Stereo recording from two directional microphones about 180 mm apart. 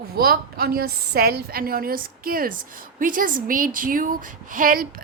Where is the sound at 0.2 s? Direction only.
55° right (ahead or behind).